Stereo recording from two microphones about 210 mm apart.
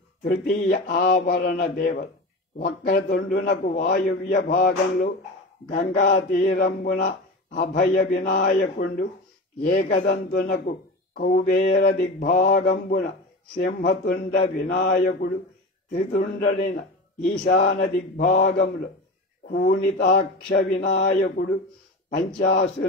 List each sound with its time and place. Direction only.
0.2 s speech: 50° left (ahead or behind)
17.5 s speech: 55° left (ahead or behind)
18.1 s speech: 45° left (ahead or behind)